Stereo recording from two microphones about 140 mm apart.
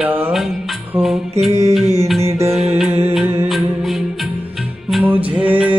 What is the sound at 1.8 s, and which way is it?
Music, 50° right (ahead or behind).